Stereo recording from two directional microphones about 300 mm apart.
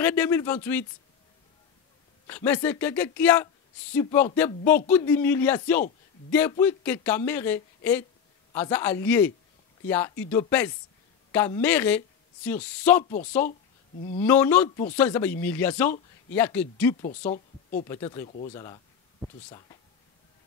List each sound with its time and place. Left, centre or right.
0.0 s speech: centre
2.2 s speech: centre
14.2 s speech: centre
17.0 s speech: left
18.2 s speech: left
19.2 s speech: centre